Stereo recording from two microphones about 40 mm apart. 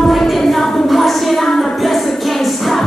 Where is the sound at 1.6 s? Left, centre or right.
Centre.